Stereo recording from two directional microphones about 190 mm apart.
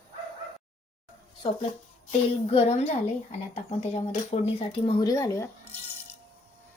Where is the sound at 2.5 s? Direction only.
35° left (ahead or behind); by 5.8 s 10° left (ahead or behind).